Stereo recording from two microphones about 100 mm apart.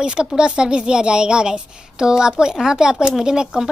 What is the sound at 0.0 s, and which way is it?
Speech, 10° right (ahead or behind).